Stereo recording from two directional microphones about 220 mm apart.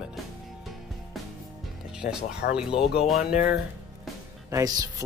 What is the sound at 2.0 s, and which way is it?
Speech, 40° left (ahead or behind).